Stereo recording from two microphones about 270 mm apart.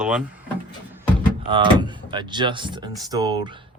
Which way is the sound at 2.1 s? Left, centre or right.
Centre.